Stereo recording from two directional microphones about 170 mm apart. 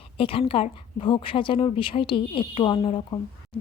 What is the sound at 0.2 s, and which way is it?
A woman's voice, 30° left (ahead or behind).